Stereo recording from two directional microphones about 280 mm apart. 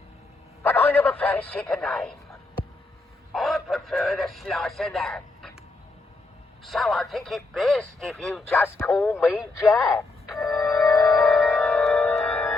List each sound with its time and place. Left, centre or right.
0.6 s a sound: centre
3.3 s speech: centre
6.7 s speech: centre
10.4 s music: centre